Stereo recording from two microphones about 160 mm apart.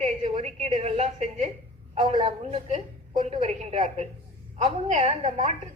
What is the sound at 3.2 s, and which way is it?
A woman's voice, 40° right (ahead or behind).